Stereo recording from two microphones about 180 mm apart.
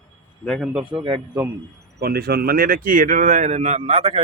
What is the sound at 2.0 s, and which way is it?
Speech, 60° right (ahead or behind).